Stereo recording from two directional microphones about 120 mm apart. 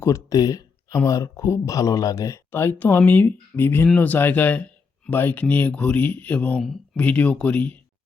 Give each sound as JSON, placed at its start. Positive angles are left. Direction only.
{"t": 0.0, "sound": "speech", "side_deg": 30}